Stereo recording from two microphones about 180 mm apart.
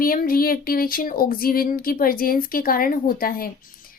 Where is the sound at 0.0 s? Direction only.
55° left (ahead or behind).